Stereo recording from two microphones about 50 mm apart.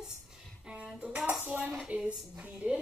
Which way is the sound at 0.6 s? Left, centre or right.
Centre.